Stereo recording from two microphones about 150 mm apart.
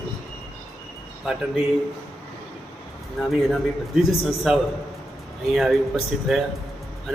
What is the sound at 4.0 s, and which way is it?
Speech, centre (ahead or behind).